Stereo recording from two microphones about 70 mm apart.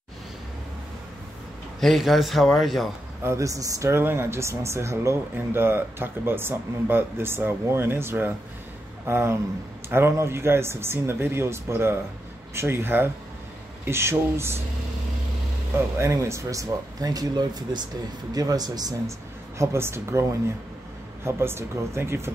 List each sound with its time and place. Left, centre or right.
1.8 s a man's voice: centre
3.3 s speech: right
3.9 s speech: right
16.0 s speech: right
18.3 s speech: right
19.6 s speech: right